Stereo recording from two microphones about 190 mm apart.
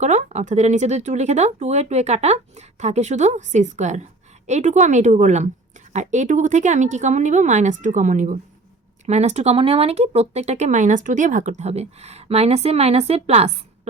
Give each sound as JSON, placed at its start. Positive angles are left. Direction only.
{"t": 0.0, "sound": "speech", "side_deg": -35}